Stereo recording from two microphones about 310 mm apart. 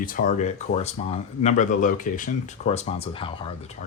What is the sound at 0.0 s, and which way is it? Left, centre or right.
Speech, left.